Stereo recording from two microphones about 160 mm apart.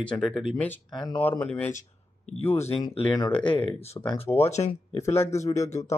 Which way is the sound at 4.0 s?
25° left (ahead or behind).